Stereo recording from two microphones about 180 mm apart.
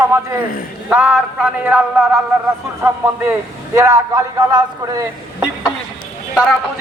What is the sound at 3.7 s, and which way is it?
Speech, 15° right (ahead or behind).